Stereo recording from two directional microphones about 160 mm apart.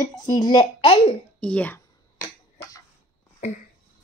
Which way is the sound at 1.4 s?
10° left (ahead or behind).